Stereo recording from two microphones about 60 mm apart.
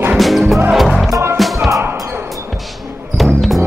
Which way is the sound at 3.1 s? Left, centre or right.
Centre.